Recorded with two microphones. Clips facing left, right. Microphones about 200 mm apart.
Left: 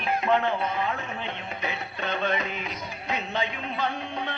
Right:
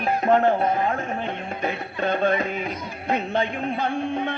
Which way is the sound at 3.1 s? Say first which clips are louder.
Right 6 dB; 50° right (ahead or behind).